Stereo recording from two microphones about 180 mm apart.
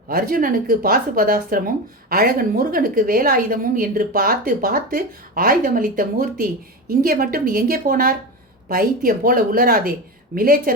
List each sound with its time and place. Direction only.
0.1 s speech: 55° right (ahead or behind)